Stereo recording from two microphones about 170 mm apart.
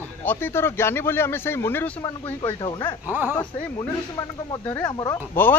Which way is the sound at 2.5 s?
25° left (ahead or behind).